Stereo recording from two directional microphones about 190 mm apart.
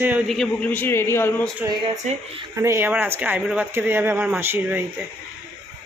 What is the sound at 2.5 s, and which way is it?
Speech, 15° right (ahead or behind).